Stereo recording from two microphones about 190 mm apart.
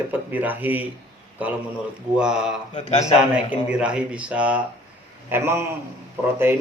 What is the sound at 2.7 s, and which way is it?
Speech, 35° left (ahead or behind).